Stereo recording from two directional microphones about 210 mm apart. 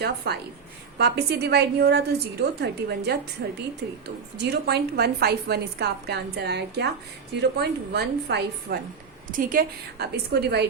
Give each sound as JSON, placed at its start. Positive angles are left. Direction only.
{"t": 0.3, "sound": "a woman's voice", "side_deg": -50}